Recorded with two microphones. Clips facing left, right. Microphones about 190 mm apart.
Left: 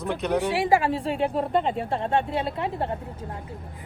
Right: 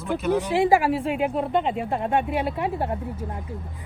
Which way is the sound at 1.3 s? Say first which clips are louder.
Right 1 dB; centre (ahead or behind).